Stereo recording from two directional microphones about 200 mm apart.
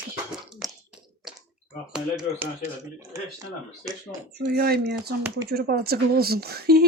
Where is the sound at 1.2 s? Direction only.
Centre (ahead or behind).